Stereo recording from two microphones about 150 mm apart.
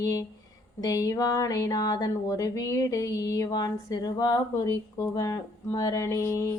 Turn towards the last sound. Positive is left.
turn(degrees=20)  # may be behind; listen again after turning